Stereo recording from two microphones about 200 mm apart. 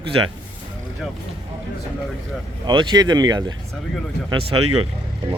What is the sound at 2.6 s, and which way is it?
Speech, 20° right (ahead or behind).